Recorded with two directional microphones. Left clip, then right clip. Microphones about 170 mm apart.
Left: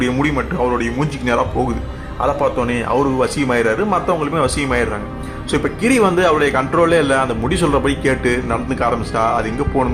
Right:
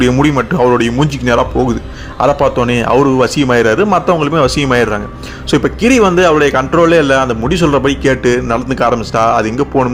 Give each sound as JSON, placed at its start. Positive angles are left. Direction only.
{"t": 0.0, "sound": "a man's voice", "side_deg": -40}